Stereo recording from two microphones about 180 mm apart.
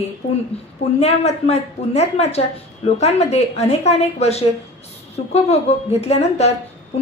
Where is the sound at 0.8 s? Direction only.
35° left (ahead or behind).